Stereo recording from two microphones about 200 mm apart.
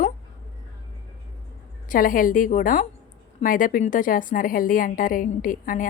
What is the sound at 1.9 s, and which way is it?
A woman's voice, 45° left (ahead or behind).